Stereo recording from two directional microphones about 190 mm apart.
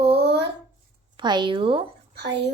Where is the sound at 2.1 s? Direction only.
65° right (ahead or behind).